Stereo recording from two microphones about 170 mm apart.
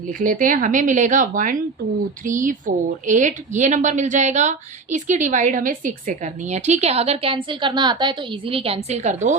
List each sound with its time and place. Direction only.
0.2 s a woman's voice: 55° right (ahead or behind)